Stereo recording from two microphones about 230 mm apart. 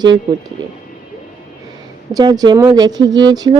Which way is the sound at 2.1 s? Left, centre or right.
Centre.